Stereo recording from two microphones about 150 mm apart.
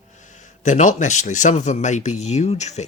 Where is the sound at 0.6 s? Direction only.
55° left (ahead or behind).